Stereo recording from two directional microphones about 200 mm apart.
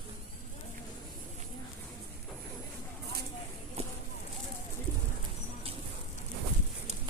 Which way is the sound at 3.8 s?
30° right (ahead or behind).